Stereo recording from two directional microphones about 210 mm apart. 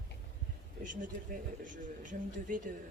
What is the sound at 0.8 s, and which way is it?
Speech, 40° right (ahead or behind).